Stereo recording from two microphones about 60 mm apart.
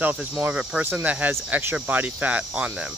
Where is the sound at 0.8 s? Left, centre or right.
Right.